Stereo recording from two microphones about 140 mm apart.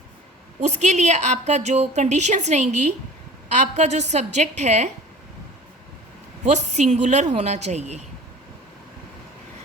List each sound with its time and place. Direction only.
0.6 s a woman's voice: 55° right (ahead or behind)
6.5 s a woman's voice: 55° right (ahead or behind)